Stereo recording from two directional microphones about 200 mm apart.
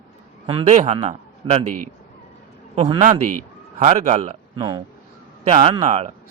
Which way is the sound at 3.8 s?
35° right (ahead or behind).